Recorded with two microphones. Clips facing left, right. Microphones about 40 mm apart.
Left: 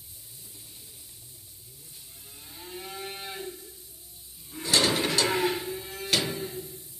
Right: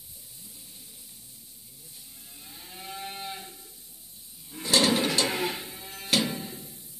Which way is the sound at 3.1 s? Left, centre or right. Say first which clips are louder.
Left 1 dB; centre.